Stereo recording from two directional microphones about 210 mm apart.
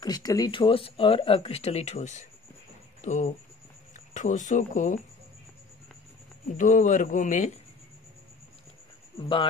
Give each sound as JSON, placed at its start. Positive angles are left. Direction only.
{"t": 0.0, "sound": "speech", "side_deg": 20}
{"t": 6.5, "sound": "a man's voice", "side_deg": 40}